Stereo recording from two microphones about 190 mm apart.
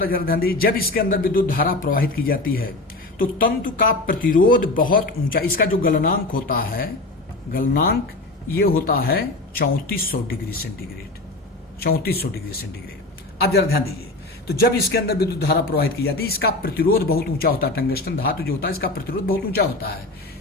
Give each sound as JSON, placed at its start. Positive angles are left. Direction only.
{"t": 0.0, "sound": "speech", "side_deg": 50}
{"t": 11.8, "sound": "a man's voice", "side_deg": 55}